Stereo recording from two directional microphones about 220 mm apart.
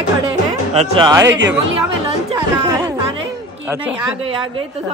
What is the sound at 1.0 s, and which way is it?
Speech, 15° right (ahead or behind).